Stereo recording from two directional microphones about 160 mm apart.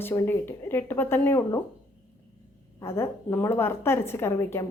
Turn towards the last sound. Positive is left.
turn(degrees=15)  # may be behind; listen again after turning